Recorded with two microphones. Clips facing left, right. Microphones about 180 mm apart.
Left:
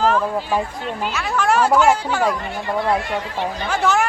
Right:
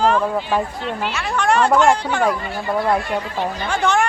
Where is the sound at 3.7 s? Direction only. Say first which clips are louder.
Even; centre (ahead or behind).